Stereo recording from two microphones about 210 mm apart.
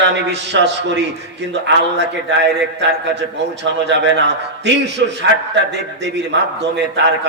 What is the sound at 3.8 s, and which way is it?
A man's voice, 55° right (ahead or behind).